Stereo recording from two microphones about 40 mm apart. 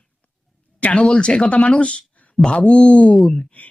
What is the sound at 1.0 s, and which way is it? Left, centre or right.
Speech, left.